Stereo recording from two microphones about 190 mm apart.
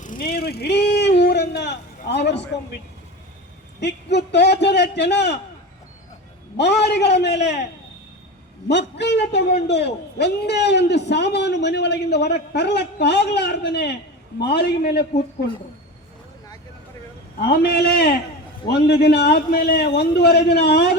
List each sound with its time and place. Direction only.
0.0 s vehicle: 45° left (ahead or behind); by 2.5 s 65° left (ahead or behind)
3.8 s a man's voice: 65° left (ahead or behind)
6.6 s a man's voice: 60° left (ahead or behind)
8.6 s a man's voice: 65° left (ahead or behind)
17.5 s a man's voice: 60° left (ahead or behind)